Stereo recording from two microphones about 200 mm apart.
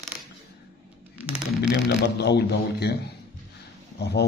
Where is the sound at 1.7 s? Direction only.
60° left (ahead or behind).